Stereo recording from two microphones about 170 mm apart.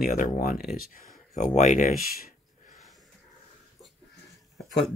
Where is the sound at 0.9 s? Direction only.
45° left (ahead or behind).